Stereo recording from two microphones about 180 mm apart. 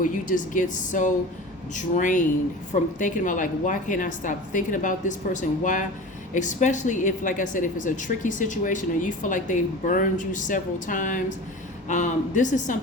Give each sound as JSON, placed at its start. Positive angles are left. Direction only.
{"t": 0.0, "sound": "a woman's voice", "side_deg": 45}